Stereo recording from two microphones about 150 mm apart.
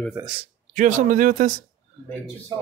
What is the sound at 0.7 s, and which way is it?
Speech, 60° right (ahead or behind).